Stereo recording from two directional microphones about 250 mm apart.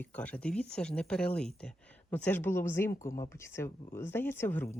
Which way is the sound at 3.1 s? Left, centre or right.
Centre.